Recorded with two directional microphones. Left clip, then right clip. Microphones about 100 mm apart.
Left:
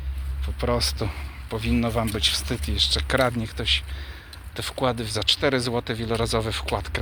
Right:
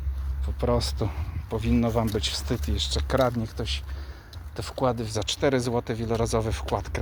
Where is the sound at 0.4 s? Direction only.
40° right (ahead or behind).